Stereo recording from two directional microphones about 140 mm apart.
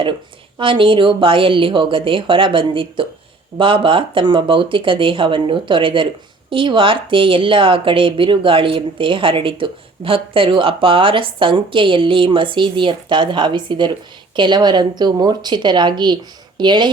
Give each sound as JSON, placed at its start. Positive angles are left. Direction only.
{"t": 0.6, "sound": "a woman's voice", "side_deg": -35}